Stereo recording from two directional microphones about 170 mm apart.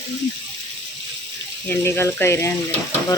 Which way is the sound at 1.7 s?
15° left (ahead or behind).